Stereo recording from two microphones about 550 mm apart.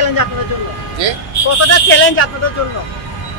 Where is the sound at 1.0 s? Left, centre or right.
Right.